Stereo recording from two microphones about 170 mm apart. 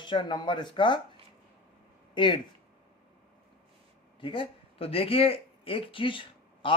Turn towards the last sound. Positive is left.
turn(degrees=30)  # may be behind; listen again after turning